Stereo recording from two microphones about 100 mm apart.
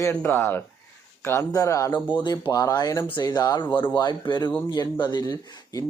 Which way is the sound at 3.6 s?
50° left (ahead or behind).